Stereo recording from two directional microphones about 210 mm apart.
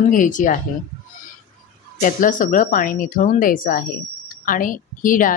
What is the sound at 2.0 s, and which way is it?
A woman's voice, 40° left (ahead or behind).